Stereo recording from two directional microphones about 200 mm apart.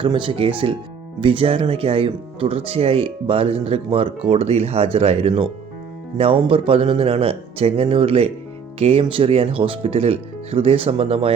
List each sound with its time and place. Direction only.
0.0 s speech: 25° right (ahead or behind)